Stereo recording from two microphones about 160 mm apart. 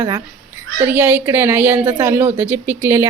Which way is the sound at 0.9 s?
10° right (ahead or behind).